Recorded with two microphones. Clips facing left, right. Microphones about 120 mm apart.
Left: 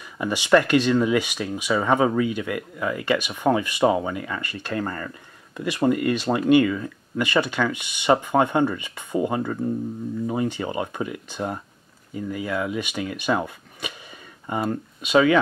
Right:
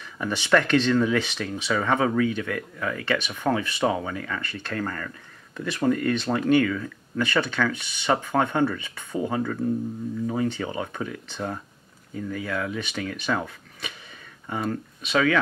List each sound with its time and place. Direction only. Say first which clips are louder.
0.2 s speech: left 3 dB; 10° left (ahead or behind)